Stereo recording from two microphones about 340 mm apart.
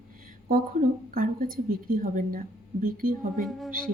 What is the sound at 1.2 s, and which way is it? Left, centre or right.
A woman's voice, right.